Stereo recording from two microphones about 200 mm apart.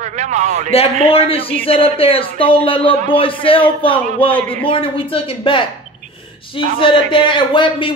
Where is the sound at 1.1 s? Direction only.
30° left (ahead or behind).